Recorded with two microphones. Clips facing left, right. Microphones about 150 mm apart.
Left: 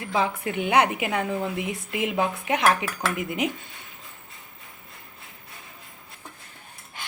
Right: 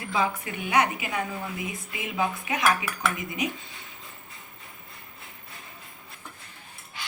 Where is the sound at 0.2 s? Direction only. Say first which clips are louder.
Left 3 dB; 70° left (ahead or behind).